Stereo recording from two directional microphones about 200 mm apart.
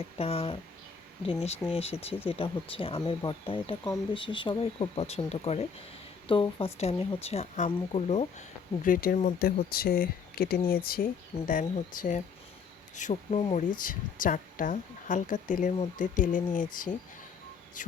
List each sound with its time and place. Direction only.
0.2 s speech: 30° left (ahead or behind); by 11.0 s 50° left (ahead or behind)
11.3 s speech: 30° left (ahead or behind)
11.9 s speech: 40° left (ahead or behind)
17.8 s speech: 40° left (ahead or behind)